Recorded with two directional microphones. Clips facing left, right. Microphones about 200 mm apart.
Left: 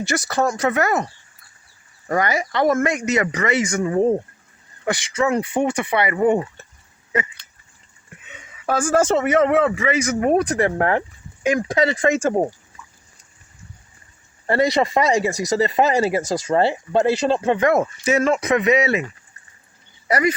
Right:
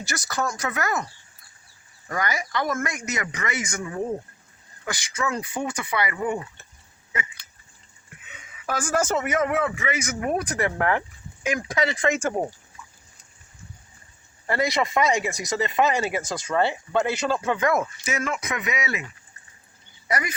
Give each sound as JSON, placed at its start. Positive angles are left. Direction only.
{"t": 0.3, "sound": "speech", "side_deg": 30}
{"t": 2.0, "sound": "speech", "side_deg": 30}
{"t": 8.3, "sound": "speech", "side_deg": 30}
{"t": 14.4, "sound": "speech", "side_deg": 35}